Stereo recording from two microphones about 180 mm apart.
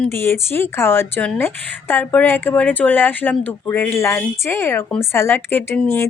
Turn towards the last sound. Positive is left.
turn(degrees=10)  # may be behind; listen again after turning